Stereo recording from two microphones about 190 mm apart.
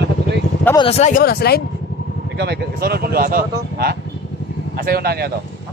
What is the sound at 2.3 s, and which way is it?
Speech, 60° right (ahead or behind).